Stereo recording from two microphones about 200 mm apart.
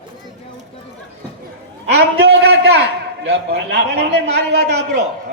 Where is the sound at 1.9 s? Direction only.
55° right (ahead or behind).